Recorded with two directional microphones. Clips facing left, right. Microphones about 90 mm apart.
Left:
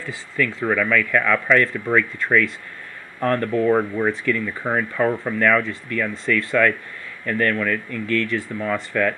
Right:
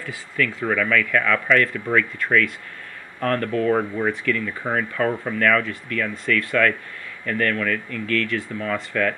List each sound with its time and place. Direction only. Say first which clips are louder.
0.0 s speech: left 1 dB; 20° left (ahead or behind)